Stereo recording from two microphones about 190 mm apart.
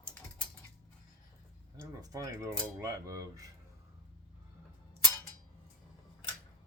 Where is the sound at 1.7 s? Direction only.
20° right (ahead or behind).